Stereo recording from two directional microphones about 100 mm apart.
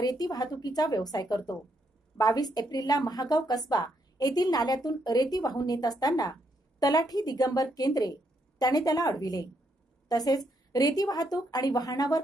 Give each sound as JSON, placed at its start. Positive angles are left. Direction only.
{"t": 0.0, "sound": "a woman's voice", "side_deg": 40}